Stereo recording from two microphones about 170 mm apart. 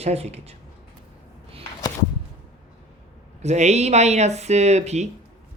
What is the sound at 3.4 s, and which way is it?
Speech, 40° right (ahead or behind).